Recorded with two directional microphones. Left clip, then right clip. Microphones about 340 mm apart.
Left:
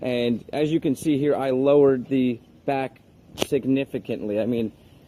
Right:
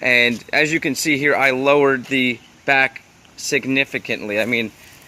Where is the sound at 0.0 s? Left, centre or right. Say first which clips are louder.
Right 9 dB; right.